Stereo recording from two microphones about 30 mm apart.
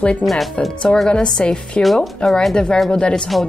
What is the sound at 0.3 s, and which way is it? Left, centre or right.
Speech, centre.